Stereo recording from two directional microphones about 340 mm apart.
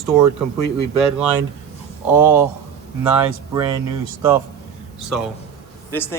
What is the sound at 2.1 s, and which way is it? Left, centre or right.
Speech, centre.